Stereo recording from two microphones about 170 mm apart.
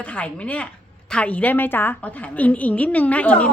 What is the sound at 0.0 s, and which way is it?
A woman's voice, 10° left (ahead or behind).